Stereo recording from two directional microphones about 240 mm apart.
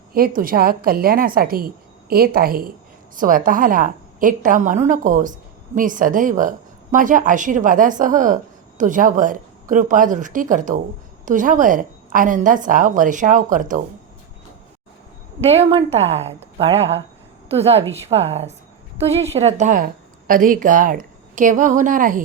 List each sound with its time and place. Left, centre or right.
0.1 s a woman's voice: right
15.4 s a woman's voice: right